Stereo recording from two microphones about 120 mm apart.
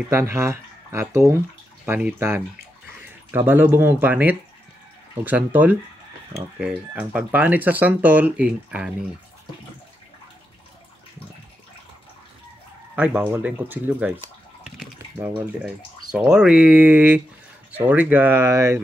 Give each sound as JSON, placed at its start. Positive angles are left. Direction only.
{"t": 0.1, "sound": "speech", "side_deg": -20}
{"t": 1.9, "sound": "speech", "side_deg": -10}
{"t": 12.9, "sound": "speech", "side_deg": -10}
{"t": 15.1, "sound": "speech", "side_deg": -15}
{"t": 16.1, "sound": "speech", "side_deg": -5}